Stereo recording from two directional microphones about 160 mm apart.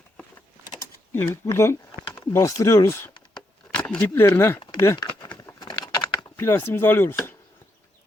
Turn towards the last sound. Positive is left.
turn(degrees=15)  # may be behind; listen again after turning